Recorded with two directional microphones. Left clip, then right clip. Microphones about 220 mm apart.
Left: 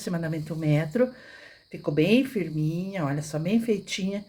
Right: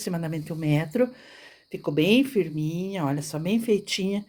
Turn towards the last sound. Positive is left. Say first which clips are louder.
# right 3 dB
turn(degrees=-30)  # may be behind; listen again after turning